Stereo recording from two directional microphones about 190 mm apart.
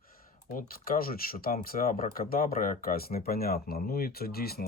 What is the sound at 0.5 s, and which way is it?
Speech, 50° left (ahead or behind).